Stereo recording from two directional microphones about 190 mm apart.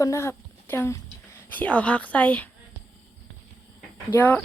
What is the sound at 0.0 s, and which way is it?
Speech, 15° left (ahead or behind).